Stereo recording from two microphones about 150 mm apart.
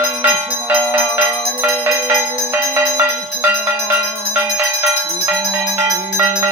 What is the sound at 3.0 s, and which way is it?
Music, 15° right (ahead or behind).